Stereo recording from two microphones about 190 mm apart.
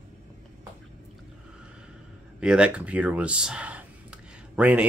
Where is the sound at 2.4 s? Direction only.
5° right (ahead or behind).